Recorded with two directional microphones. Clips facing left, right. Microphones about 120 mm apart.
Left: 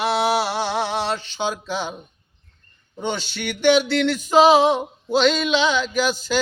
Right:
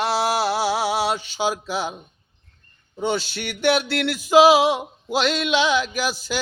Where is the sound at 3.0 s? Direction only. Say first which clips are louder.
Right 2 dB; 5° right (ahead or behind).